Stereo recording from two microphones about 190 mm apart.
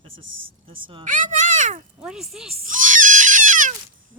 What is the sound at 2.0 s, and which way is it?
Speech, centre (ahead or behind).